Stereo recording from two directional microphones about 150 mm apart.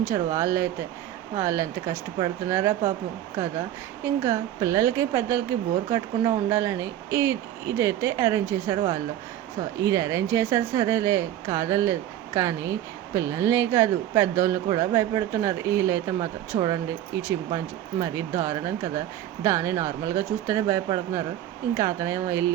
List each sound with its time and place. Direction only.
0.0 s a woman's voice: 20° right (ahead or behind)
4.0 s a woman's voice: 20° right (ahead or behind)
9.8 s a woman's voice: 20° right (ahead or behind)